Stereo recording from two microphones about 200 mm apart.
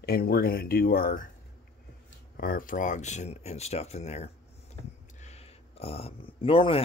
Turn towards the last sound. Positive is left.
turn(degrees=30)  # may be behind; listen again after turning